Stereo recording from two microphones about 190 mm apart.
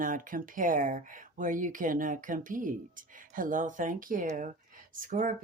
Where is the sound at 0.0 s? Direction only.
45° right (ahead or behind).